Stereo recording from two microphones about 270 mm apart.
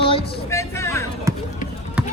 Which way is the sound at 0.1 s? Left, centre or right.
Centre.